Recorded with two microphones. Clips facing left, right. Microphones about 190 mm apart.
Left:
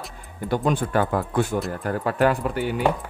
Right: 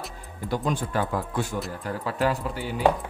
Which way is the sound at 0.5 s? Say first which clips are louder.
Left 5 dB; 60° left (ahead or behind).